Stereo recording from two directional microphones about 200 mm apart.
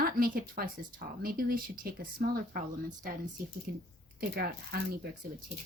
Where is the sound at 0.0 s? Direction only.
45° right (ahead or behind).